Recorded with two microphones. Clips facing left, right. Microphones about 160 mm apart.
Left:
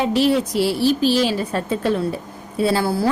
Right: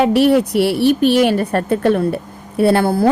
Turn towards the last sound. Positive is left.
turn(degrees=-55)  # may be behind; listen again after turning